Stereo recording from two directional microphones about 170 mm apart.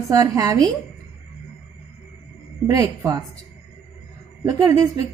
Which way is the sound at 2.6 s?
20° right (ahead or behind).